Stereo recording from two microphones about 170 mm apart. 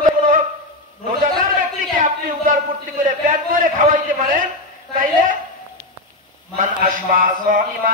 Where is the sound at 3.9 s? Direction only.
50° right (ahead or behind).